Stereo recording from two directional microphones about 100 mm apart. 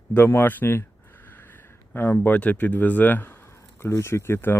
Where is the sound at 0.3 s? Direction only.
20° left (ahead or behind).